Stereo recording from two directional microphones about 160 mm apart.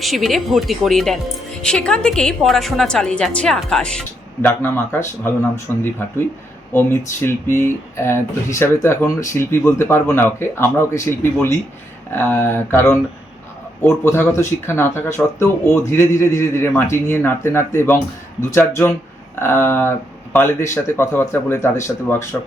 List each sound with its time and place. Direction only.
0.0 s a woman's voice: centre (ahead or behind)
7.3 s speech: 15° left (ahead or behind)